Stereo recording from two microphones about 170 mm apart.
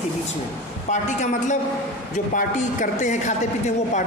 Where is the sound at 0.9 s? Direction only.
45° left (ahead or behind).